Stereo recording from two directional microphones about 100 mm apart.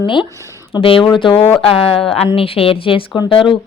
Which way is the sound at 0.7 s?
65° left (ahead or behind).